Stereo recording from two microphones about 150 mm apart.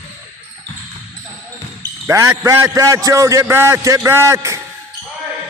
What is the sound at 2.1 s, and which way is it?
A man's voice, 20° right (ahead or behind).